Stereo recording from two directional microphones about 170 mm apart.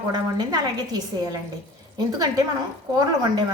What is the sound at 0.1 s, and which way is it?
Speech, 25° right (ahead or behind).